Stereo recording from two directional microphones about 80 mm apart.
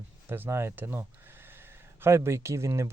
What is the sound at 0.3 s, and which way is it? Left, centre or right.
Speech, right.